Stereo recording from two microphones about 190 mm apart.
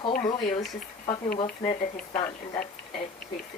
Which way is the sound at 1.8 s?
40° left (ahead or behind).